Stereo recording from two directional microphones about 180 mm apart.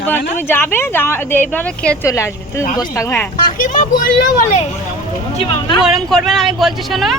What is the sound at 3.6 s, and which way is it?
Speech, 45° left (ahead or behind).